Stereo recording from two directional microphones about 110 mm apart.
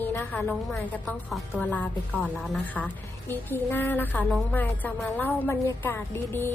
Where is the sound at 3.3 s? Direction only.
20° left (ahead or behind).